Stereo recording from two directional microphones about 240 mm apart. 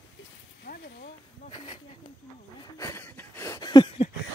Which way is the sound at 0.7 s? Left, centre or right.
Left.